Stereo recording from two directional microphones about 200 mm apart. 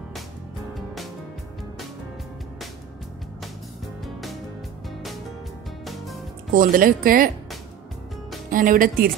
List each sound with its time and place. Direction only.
4.0 s music: centre (ahead or behind)
6.5 s speech: 45° right (ahead or behind)
8.5 s speech: 45° right (ahead or behind)